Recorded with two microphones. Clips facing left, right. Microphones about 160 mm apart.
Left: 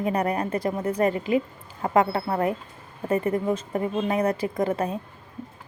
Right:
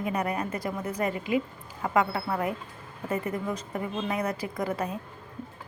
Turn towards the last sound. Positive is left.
turn(degrees=30)  # may be behind; listen again after turning